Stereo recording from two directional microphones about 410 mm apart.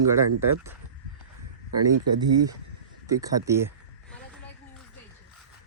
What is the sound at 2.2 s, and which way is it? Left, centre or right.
Speech, centre.